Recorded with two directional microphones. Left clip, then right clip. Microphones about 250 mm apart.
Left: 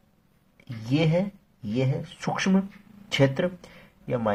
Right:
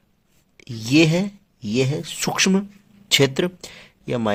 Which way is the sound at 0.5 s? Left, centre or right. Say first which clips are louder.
Right 10 dB; right.